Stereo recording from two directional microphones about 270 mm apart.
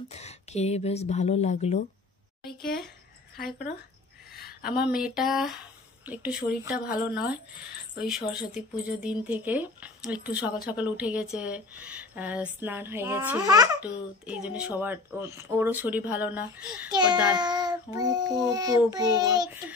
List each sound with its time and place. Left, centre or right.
0.1 s speech: left
3.3 s speech: left
4.6 s speech: centre
8.5 s speech: centre
16.9 s child singing: centre